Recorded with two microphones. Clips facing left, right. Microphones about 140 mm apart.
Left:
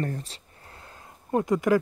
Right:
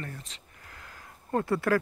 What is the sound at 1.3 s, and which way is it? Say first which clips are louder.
Speech: left 4 dB; 15° left (ahead or behind).